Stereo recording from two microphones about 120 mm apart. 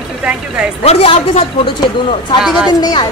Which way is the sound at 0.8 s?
55° left (ahead or behind).